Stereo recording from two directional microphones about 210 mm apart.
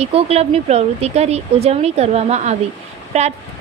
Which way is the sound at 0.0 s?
30° right (ahead or behind).